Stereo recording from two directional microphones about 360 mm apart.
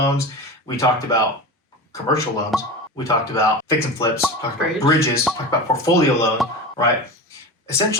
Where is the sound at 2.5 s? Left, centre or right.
Centre.